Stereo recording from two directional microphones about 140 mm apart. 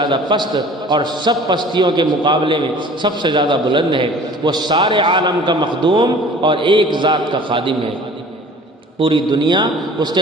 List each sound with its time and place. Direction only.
0.0 s a man's voice: 35° right (ahead or behind)
9.0 s a man's voice: 35° right (ahead or behind)